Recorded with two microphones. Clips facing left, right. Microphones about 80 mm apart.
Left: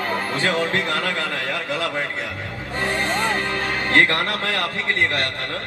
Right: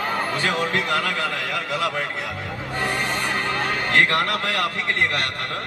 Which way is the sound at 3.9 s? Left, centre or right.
Left.